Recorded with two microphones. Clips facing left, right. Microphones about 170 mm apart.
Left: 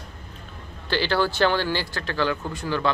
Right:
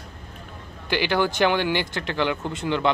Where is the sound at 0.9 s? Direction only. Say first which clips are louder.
Right 1 dB; 15° right (ahead or behind).